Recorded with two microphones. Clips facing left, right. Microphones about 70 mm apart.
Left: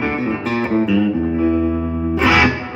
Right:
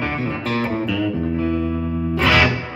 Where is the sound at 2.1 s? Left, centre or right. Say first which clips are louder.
Left 3 dB; centre.